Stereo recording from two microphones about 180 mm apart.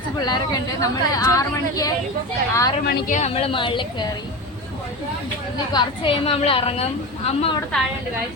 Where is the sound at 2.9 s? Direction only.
45° left (ahead or behind); by 4.1 s 25° left (ahead or behind).